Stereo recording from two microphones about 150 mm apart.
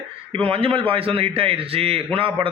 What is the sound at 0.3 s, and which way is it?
A man's voice, 40° right (ahead or behind).